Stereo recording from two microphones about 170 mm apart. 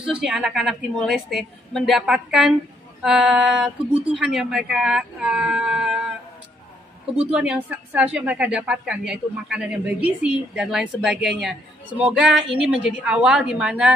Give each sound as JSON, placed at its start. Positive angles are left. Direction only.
{"t": 0.2, "sound": "a woman's voice", "side_deg": -5}
{"t": 7.3, "sound": "a woman's voice", "side_deg": -5}